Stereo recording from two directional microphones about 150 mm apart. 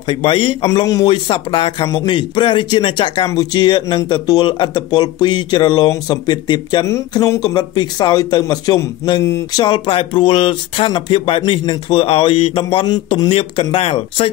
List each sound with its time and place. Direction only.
0.1 s speech: 35° left (ahead or behind)
0.7 s speech: 25° left (ahead or behind)
9.8 s speech: 35° left (ahead or behind)